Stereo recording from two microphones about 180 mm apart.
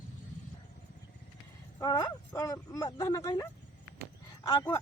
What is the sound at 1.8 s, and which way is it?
Speech, 20° left (ahead or behind).